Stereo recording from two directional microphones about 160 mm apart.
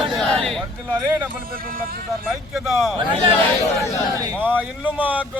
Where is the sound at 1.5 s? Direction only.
65° right (ahead or behind).